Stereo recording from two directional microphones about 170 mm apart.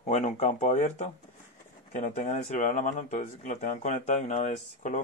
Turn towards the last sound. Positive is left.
turn(degrees=45)  # may be behind; listen again after turning